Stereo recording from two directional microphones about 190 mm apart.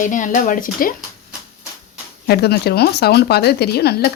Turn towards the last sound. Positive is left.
turn(degrees=55)  # may be behind; listen again after turning